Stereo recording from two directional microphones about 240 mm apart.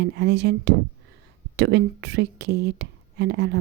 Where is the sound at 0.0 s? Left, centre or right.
Right.